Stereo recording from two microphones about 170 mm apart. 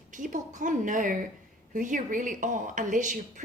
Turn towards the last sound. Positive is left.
turn(degrees=-50)  # may be behind; listen again after turning